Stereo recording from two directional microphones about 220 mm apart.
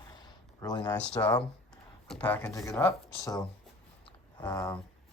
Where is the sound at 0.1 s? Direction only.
20° left (ahead or behind).